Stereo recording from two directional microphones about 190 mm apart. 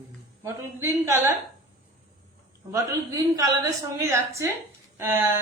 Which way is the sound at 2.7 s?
15° right (ahead or behind).